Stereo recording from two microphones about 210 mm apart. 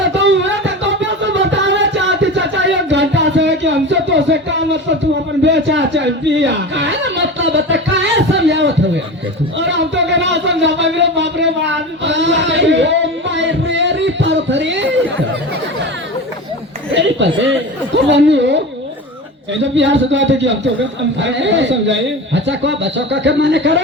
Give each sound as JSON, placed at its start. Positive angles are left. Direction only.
{"t": 0.1, "sound": "music", "side_deg": -60}
{"t": 5.4, "sound": "a sound", "side_deg": -55}
{"t": 16.9, "sound": "chuckle", "side_deg": -60}
{"t": 19.7, "sound": "a man's voice", "side_deg": -60}